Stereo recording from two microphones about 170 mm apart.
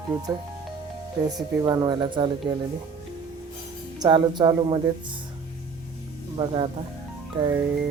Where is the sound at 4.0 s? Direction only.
25° right (ahead or behind).